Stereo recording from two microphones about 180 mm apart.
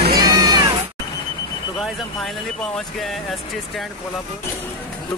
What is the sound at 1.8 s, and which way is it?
A man's voice, centre (ahead or behind).